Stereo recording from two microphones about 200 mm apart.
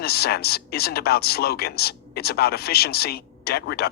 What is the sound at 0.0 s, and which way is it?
A woman's voice, 50° left (ahead or behind).